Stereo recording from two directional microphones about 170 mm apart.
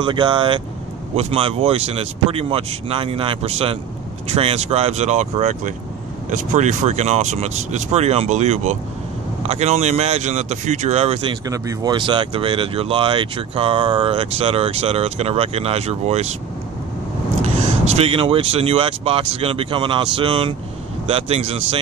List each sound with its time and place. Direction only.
0.0 s speech: 30° right (ahead or behind)
11.4 s speech: 20° right (ahead or behind); by 16.3 s 40° right (ahead or behind)
17.4 s speech: 40° right (ahead or behind)